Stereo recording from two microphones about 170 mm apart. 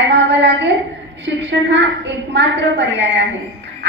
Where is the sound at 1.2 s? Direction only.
90° right.